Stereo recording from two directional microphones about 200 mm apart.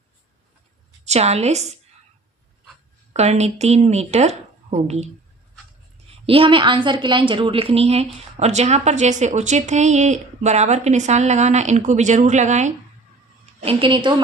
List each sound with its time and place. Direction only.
1.0 s a woman's voice: 35° right (ahead or behind)
3.1 s a woman's voice: 35° right (ahead or behind)
6.2 s a woman's voice: 25° right (ahead or behind)